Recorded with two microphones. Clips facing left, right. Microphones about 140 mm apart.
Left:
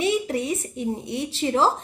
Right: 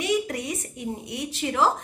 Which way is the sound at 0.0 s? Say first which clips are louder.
Left 3 dB; 25° left (ahead or behind).